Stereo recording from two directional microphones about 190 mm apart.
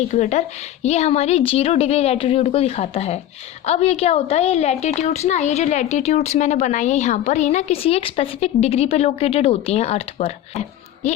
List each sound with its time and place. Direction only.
0.1 s a woman's voice: 35° left (ahead or behind)